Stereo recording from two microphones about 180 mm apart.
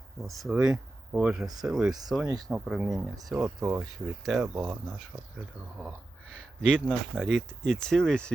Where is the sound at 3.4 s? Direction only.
15° right (ahead or behind).